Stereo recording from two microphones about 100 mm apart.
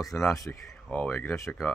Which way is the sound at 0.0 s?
5° left (ahead or behind).